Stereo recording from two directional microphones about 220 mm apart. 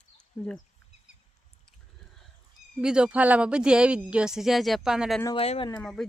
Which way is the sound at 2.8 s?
5° right (ahead or behind).